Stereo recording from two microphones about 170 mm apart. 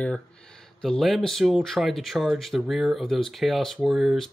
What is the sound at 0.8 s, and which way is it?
Speech, centre (ahead or behind).